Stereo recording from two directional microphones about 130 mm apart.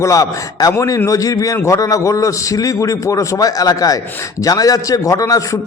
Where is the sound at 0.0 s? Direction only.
25° left (ahead or behind).